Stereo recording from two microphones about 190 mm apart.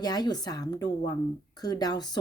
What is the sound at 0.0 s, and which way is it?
Speech, 20° left (ahead or behind).